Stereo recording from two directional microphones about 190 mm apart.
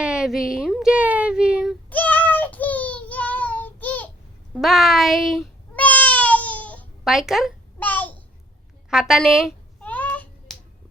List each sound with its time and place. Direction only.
0.0 s a sound: 5° right (ahead or behind)
1.9 s child singing: 10° left (ahead or behind)
4.5 s meow: centre (ahead or behind)
7.1 s a woman's voice: centre (ahead or behind)
7.8 s a sound: 10° left (ahead or behind)
8.9 s a woman's voice: centre (ahead or behind)
9.8 s finger snapping: 10° left (ahead or behind)